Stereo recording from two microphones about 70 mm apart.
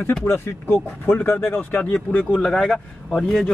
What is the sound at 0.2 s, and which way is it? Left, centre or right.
Speech, left.